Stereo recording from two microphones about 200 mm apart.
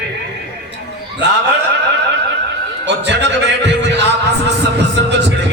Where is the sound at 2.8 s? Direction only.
60° right (ahead or behind).